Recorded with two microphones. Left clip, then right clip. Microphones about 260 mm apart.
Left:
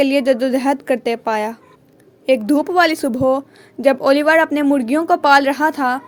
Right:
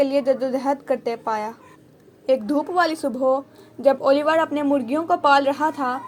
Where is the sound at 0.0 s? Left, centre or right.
Left.